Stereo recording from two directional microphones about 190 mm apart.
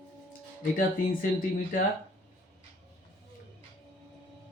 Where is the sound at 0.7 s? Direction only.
45° left (ahead or behind).